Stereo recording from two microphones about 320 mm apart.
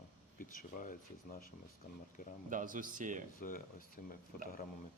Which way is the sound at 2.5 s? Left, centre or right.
Right.